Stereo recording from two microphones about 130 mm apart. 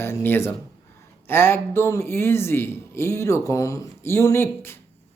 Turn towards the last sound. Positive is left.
turn(degrees=20)  # may be behind; listen again after turning